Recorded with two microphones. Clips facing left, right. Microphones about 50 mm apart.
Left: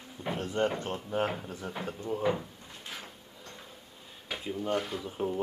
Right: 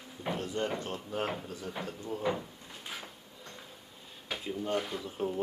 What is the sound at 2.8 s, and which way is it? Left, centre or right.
Drawer open or close, centre.